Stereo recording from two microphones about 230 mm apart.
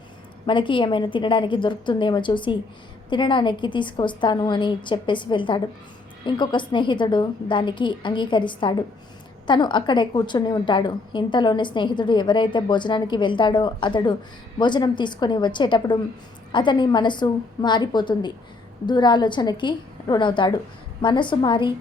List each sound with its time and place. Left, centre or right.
0.4 s a woman's voice: left